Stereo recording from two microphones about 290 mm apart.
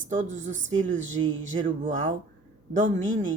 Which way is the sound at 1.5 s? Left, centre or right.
Right.